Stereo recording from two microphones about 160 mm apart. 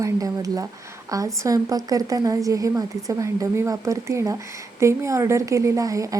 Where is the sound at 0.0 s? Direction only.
20° right (ahead or behind).